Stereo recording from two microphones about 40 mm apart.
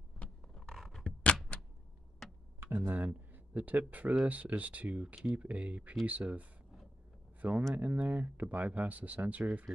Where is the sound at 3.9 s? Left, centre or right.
Right.